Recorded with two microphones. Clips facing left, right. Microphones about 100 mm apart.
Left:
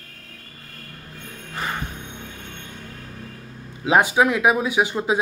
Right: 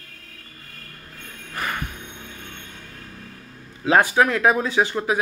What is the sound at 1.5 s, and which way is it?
Music, 20° left (ahead or behind).